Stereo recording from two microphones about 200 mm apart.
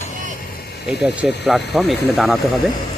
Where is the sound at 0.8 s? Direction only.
5° right (ahead or behind).